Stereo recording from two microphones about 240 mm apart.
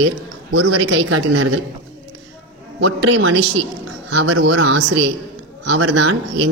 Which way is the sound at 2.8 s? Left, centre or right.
Right.